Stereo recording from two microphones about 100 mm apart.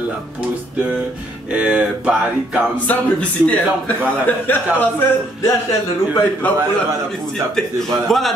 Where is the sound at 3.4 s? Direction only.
15° left (ahead or behind).